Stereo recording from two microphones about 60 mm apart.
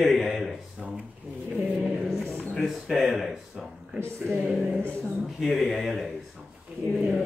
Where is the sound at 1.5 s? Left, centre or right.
Right.